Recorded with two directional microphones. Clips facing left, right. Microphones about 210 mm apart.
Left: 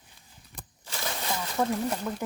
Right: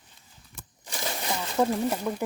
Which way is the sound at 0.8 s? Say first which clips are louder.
Right 2 dB; 15° right (ahead or behind).